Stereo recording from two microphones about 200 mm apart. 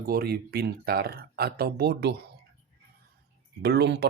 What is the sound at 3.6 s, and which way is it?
Speech, 55° right (ahead or behind).